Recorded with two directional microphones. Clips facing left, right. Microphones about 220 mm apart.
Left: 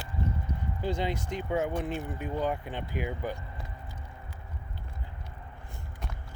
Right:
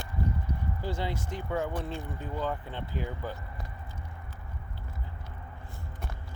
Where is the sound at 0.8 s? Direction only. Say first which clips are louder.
Left 4 dB; 20° left (ahead or behind).